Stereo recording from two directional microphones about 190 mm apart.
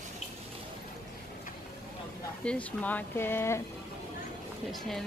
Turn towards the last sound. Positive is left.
turn(degrees=0)  # may be behind; listen again after turning